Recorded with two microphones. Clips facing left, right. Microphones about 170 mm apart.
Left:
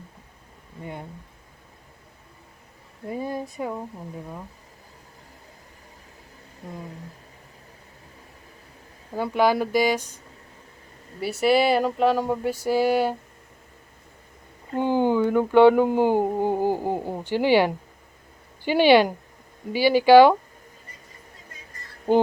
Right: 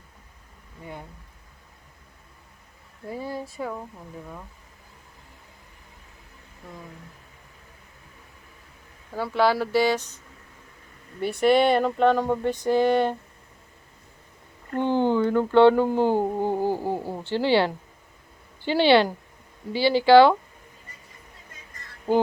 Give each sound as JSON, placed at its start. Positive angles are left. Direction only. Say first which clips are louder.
{"t": 3.1, "sound": "speech", "louder": "left 3 dB", "side_deg": 20}
{"t": 9.1, "sound": "speech", "louder": "left 1 dB", "side_deg": 15}
{"t": 11.2, "sound": "speech", "louder": "right 1 dB", "side_deg": 5}
{"t": 14.7, "sound": "speech", "louder": "left 1 dB", "side_deg": 10}